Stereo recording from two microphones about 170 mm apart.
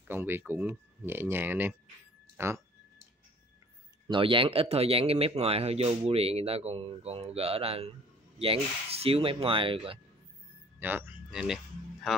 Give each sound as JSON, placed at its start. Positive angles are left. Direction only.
{"t": 0.1, "sound": "speech", "side_deg": -15}
{"t": 4.1, "sound": "speech", "side_deg": -30}
{"t": 10.8, "sound": "a sound", "side_deg": -10}